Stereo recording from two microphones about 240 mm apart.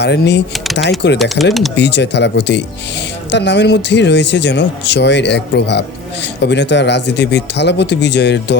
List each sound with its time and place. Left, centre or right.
0.0 s speech: left
0.5 s typing: centre
0.8 s speech: left